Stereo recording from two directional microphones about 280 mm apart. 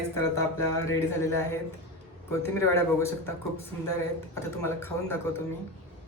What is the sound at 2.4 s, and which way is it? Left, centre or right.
Speech, centre.